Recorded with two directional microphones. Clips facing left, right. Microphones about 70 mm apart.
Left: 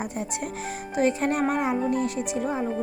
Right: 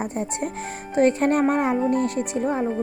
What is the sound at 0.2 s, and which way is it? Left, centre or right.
A woman's voice, right.